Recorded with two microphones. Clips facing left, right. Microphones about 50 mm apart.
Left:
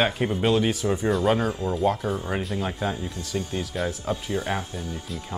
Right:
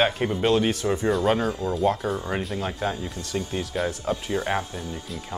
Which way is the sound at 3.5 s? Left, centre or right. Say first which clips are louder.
Right 1 dB; centre.